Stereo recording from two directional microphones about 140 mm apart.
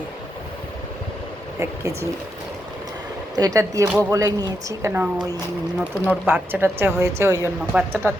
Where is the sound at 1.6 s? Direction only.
20° right (ahead or behind).